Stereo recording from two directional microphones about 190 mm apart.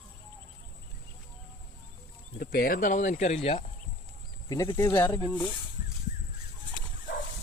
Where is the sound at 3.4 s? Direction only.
25° left (ahead or behind).